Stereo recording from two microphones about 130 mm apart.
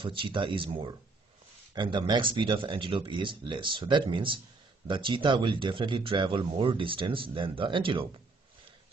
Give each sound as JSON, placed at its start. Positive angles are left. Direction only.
{"t": 0.0, "sound": "speech", "side_deg": -40}